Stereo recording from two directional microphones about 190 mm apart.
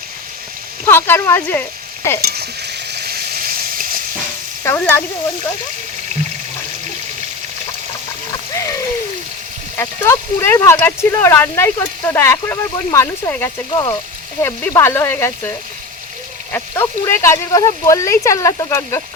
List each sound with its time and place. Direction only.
0.9 s speech: 10° left (ahead or behind)
2.2 s frying: 55° right (ahead or behind)
4.6 s speech: 15° left (ahead or behind)
9.7 s speech: 15° left (ahead or behind)